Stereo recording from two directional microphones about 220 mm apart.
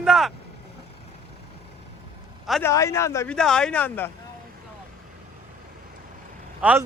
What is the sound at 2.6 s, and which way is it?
A man's voice, 15° left (ahead or behind).